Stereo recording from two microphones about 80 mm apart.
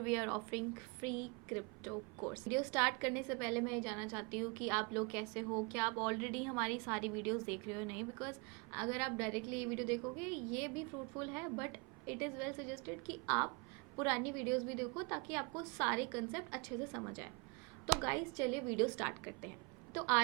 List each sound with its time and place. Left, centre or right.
0.0 s a woman's voice: centre